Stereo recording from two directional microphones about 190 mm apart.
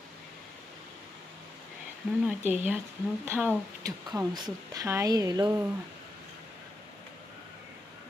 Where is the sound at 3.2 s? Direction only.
10° right (ahead or behind).